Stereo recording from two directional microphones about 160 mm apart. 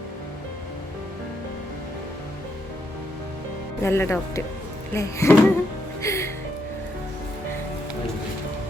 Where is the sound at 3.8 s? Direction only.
15° left (ahead or behind).